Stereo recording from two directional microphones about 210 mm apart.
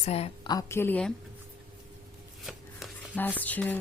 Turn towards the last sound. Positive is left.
turn(degrees=10)  # may be behind; listen again after turning